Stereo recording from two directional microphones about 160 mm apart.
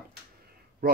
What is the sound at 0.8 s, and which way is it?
Speech, 70° right (ahead or behind).